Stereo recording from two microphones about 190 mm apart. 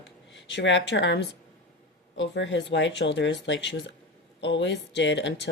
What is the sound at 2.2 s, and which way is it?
Speech, 75° left (ahead or behind).